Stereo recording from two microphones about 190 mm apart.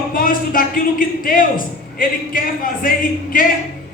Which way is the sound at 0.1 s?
45° left (ahead or behind).